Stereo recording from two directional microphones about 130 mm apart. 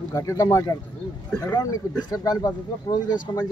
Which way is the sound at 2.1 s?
30° left (ahead or behind).